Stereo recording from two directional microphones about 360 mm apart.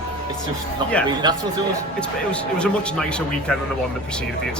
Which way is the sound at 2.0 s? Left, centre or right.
Centre.